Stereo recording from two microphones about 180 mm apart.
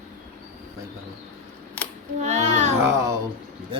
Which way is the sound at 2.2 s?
40° right (ahead or behind).